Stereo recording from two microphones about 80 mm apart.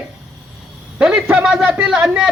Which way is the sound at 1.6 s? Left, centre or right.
Right.